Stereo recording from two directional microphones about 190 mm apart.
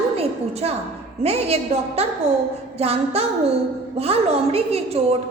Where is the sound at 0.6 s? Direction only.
30° right (ahead or behind).